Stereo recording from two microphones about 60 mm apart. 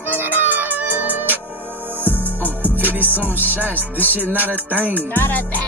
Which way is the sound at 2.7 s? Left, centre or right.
Right.